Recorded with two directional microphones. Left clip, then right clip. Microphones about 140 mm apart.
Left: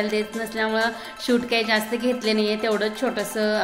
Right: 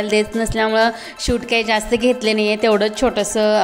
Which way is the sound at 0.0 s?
65° right (ahead or behind).